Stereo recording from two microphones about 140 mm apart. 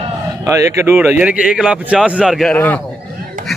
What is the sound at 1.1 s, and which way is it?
A man's voice, 10° right (ahead or behind).